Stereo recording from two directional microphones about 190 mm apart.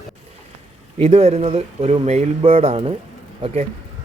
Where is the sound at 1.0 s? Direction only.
30° right (ahead or behind).